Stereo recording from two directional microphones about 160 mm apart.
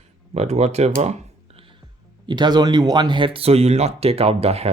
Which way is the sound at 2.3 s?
25° right (ahead or behind).